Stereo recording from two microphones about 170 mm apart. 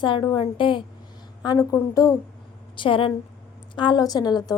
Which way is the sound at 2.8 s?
30° left (ahead or behind).